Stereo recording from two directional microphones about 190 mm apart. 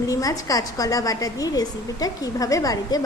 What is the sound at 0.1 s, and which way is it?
A woman's voice, 20° left (ahead or behind).